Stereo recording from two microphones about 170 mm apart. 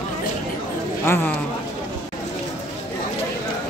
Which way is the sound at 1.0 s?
15° left (ahead or behind).